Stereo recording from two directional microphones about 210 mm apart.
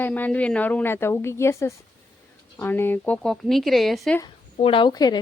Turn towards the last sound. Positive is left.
turn(degrees=20)  # may be behind; listen again after turning